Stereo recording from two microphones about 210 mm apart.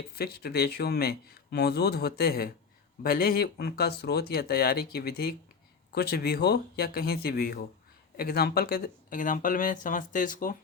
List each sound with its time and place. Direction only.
0.2 s speech: 50° left (ahead or behind)